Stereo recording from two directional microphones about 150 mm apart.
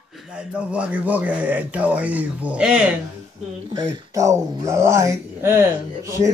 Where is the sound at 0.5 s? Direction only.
10° right (ahead or behind).